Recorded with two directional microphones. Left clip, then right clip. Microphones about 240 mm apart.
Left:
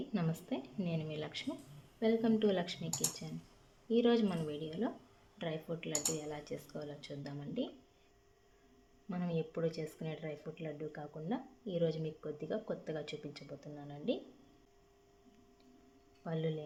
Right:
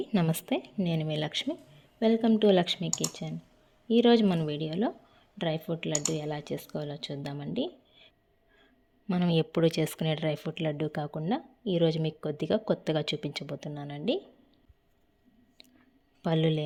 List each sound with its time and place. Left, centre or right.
0.1 s speech: right
9.0 s speech: right
16.2 s speech: right